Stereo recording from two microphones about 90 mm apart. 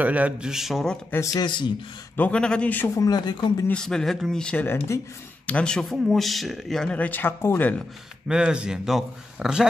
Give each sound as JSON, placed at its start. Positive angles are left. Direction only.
{"t": 0.0, "sound": "a man's voice", "side_deg": -15}
{"t": 0.5, "sound": "speech", "side_deg": -5}
{"t": 1.2, "sound": "speech", "side_deg": 40}
{"t": 2.1, "sound": "a man's voice", "side_deg": 15}
{"t": 3.0, "sound": "speech", "side_deg": 50}
{"t": 3.7, "sound": "speech", "side_deg": 5}
{"t": 4.6, "sound": "speech", "side_deg": 25}
{"t": 5.5, "sound": "speech", "side_deg": 10}
{"t": 7.0, "sound": "speech", "side_deg": 20}
{"t": 8.3, "sound": "a man's voice", "side_deg": -10}